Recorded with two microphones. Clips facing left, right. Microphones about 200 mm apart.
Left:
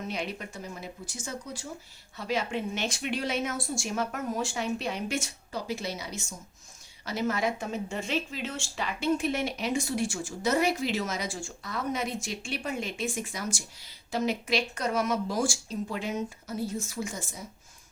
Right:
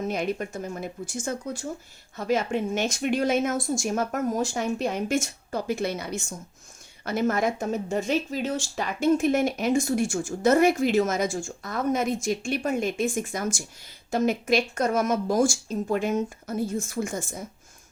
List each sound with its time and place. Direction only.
0.1 s speech: 50° right (ahead or behind)